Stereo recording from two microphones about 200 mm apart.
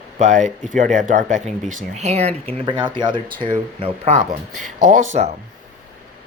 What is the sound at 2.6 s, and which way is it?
Speech, 25° right (ahead or behind).